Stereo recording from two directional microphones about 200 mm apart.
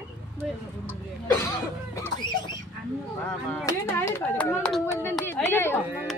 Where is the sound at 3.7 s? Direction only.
15° left (ahead or behind).